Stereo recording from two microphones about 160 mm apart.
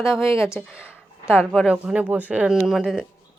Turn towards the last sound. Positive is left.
turn(degrees=0)  # may be behind; listen again after turning